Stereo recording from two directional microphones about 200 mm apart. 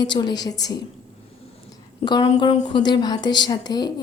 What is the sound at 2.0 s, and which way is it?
A woman's voice, 20° left (ahead or behind).